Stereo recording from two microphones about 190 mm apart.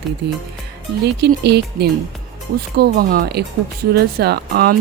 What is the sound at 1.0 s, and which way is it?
Speech, 60° right (ahead or behind).